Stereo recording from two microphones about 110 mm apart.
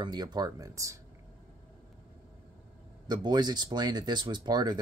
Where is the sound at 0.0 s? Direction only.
40° right (ahead or behind).